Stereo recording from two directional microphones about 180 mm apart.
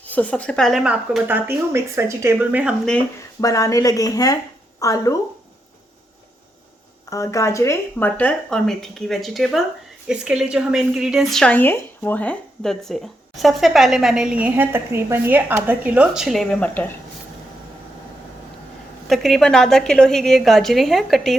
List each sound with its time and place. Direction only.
0.1 s speech: 10° left (ahead or behind); by 2.7 s 10° right (ahead or behind)
3.4 s speech: 20° left (ahead or behind)
7.1 s a woman's voice: 15° left (ahead or behind)
19.0 s a woman's voice: centre (ahead or behind)